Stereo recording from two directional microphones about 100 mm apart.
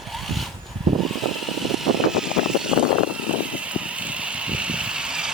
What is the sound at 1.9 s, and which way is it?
Vehicle, 5° right (ahead or behind).